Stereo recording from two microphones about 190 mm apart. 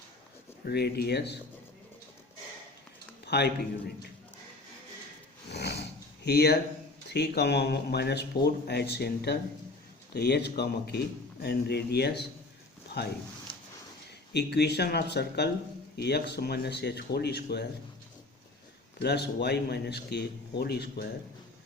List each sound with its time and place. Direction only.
0.6 s speech: 55° left (ahead or behind)
3.2 s speech: 60° left (ahead or behind)
5.5 s a sound: 60° left (ahead or behind)
6.2 s speech: 60° left (ahead or behind)
14.3 s speech: 60° left (ahead or behind)
18.9 s speech: 60° left (ahead or behind)